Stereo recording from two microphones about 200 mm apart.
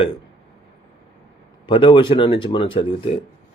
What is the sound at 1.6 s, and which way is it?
A man's voice, 25° left (ahead or behind).